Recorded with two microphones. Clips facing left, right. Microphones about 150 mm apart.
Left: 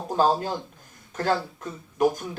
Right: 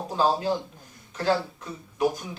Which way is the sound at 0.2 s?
45° left (ahead or behind).